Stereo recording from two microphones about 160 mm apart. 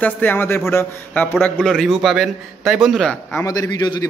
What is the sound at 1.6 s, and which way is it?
A man's voice, centre (ahead or behind).